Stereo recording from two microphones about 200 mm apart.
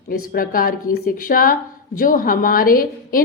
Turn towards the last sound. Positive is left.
turn(degrees=45)  # may be behind; listen again after turning